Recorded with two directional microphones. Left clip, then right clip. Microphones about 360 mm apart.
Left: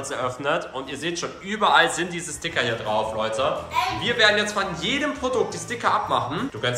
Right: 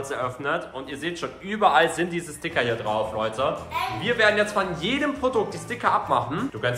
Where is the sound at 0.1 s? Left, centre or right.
Centre.